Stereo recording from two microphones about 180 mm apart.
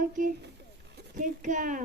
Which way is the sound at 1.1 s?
45° right (ahead or behind).